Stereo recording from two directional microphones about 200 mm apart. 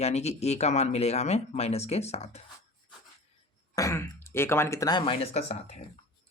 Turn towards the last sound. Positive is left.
turn(degrees=35)  # may be behind; listen again after turning